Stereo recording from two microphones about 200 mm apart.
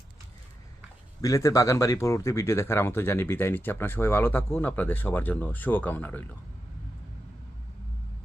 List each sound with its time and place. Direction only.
1.2 s speech: 15° left (ahead or behind)